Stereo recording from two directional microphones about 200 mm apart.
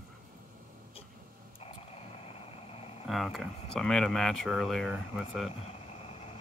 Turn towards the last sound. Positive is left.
turn(degrees=30)  # may be behind; listen again after turning